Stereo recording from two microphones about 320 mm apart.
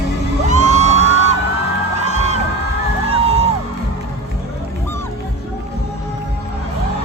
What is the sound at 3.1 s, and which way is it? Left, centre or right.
Music, centre.